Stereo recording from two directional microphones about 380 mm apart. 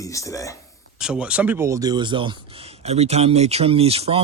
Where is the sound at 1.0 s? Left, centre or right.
Centre.